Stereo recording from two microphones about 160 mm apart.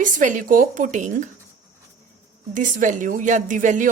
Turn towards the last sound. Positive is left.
turn(degrees=-50)  # may be behind; listen again after turning